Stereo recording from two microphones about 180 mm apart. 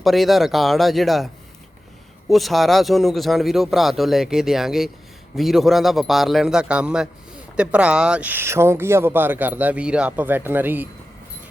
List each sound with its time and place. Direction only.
0.0 s speech: centre (ahead or behind)
2.3 s speech: centre (ahead or behind)